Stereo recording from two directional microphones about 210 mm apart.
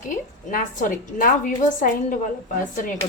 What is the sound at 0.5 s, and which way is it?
Speech, 40° left (ahead or behind).